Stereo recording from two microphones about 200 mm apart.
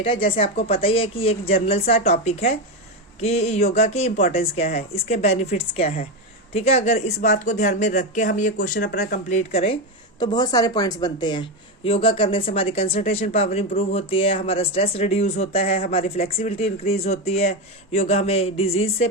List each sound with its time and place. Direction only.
0.0 s speech: 25° left (ahead or behind)
10.2 s speech: 20° left (ahead or behind)